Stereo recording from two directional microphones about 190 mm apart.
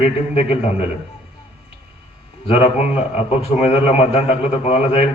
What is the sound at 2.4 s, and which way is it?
A man's voice, 30° left (ahead or behind).